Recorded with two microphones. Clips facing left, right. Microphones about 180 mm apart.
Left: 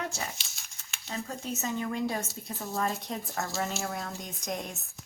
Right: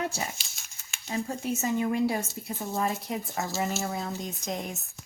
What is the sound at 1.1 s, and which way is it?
A woman's voice, 15° right (ahead or behind).